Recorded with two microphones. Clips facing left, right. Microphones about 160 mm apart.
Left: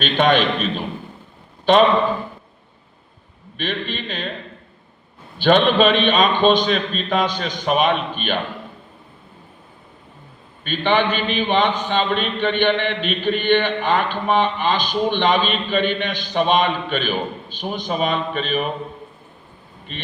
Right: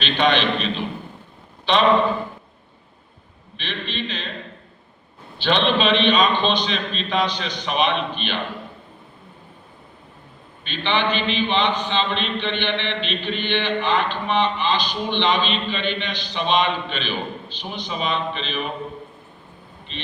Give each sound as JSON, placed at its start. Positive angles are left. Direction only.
{"t": 0.0, "sound": "a man's voice", "side_deg": 50}
{"t": 1.7, "sound": "a man's voice", "side_deg": 50}
{"t": 3.6, "sound": "a man's voice", "side_deg": 50}
{"t": 5.4, "sound": "a man's voice", "side_deg": 50}
{"t": 10.6, "sound": "a man's voice", "side_deg": 45}
{"t": 19.9, "sound": "a man's voice", "side_deg": 50}